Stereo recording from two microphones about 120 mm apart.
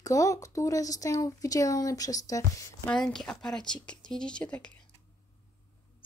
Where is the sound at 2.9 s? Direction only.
5° left (ahead or behind).